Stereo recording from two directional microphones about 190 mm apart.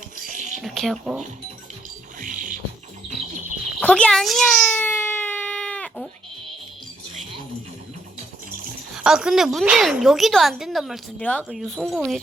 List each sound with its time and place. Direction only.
0.3 s a sound: 40° right (ahead or behind)
0.6 s speech: centre (ahead or behind)
2.2 s music: 45° right (ahead or behind)
3.8 s baby cry: 5° left (ahead or behind)
9.0 s speech: 5° right (ahead or behind)